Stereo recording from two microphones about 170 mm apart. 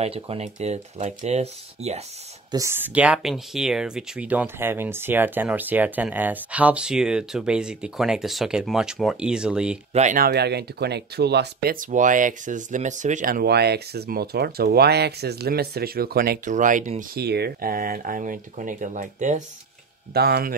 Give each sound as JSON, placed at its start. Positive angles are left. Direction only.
{"t": 0.0, "sound": "speech", "side_deg": -35}
{"t": 2.5, "sound": "speech", "side_deg": -15}
{"t": 9.9, "sound": "speech", "side_deg": -45}
{"t": 10.2, "sound": "speech", "side_deg": -75}
{"t": 16.5, "sound": "speech", "side_deg": -50}
{"t": 17.2, "sound": "speech", "side_deg": -70}
{"t": 20.1, "sound": "speech", "side_deg": -65}